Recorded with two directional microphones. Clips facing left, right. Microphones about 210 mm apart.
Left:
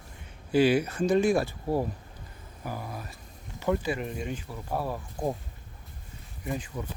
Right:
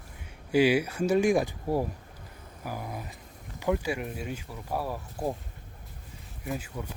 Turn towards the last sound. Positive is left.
turn(degrees=-5)  # may be behind; listen again after turning